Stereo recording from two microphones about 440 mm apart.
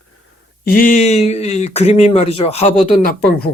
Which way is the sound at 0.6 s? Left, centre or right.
Centre.